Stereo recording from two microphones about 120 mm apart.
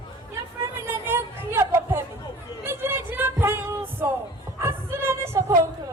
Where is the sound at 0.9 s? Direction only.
20° right (ahead or behind).